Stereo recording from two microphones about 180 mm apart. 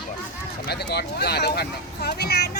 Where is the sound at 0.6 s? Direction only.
65° left (ahead or behind).